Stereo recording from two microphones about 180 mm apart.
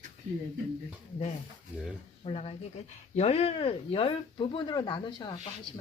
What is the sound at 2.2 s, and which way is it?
A woman's voice, 35° left (ahead or behind).